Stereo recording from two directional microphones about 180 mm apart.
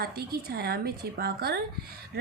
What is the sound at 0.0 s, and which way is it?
A woman's voice, 60° right (ahead or behind).